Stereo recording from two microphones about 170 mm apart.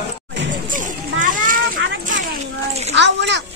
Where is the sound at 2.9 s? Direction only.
90° right.